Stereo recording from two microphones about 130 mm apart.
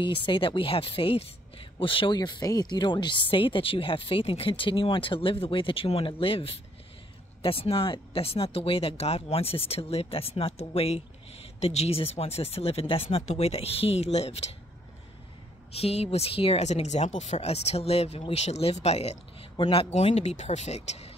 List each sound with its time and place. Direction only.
0.0 s a woman's voice: 40° left (ahead or behind); by 14.5 s 55° left (ahead or behind)
15.7 s speech: 50° left (ahead or behind)
19.5 s speech: 40° left (ahead or behind)
19.9 s speech: 55° left (ahead or behind)